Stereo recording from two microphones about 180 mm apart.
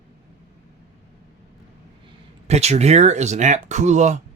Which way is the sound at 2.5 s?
35° right (ahead or behind).